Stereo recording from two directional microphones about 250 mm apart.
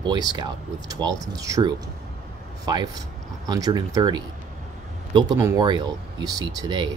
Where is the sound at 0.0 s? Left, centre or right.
Centre.